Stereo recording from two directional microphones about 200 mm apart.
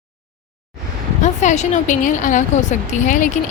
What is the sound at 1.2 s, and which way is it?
A woman's voice, 35° left (ahead or behind).